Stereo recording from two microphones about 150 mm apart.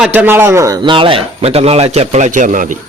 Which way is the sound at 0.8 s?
35° right (ahead or behind).